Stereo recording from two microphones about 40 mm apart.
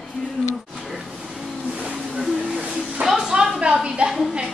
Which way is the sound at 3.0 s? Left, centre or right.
Centre.